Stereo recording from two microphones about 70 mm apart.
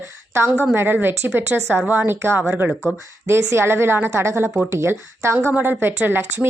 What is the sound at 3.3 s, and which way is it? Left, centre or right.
A woman's voice, right.